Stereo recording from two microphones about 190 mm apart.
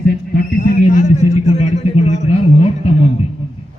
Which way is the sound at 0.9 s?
40° left (ahead or behind).